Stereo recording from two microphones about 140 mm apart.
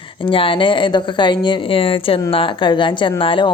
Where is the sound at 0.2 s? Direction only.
40° left (ahead or behind).